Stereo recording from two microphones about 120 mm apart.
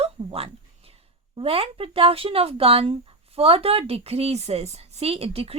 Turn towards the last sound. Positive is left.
turn(degrees=-55)  # may be behind; listen again after turning